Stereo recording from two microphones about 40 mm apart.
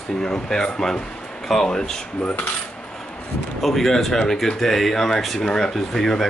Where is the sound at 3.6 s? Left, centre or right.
Centre.